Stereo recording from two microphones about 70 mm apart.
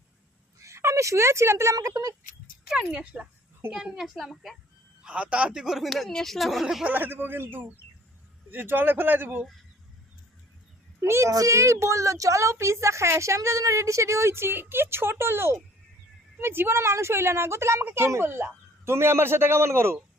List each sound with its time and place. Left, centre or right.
0.6 s a woman's voice: right
1.7 s speech: right
2.6 s speech: centre
3.7 s speech: centre
5.0 s speech: centre
6.8 s speech: right
11.0 s a child's voice: right
11.3 s a woman's voice: right